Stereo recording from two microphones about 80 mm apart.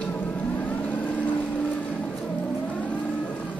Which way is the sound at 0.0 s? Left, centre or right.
Left.